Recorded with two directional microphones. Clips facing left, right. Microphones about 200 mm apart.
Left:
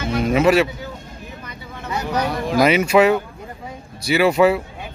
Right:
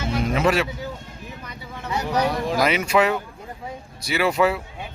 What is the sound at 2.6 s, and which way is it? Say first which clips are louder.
Speech: left 7 dB; 5° left (ahead or behind).